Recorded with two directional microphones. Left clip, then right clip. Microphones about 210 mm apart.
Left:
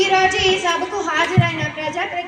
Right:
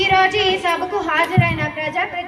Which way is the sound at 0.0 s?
40° left (ahead or behind).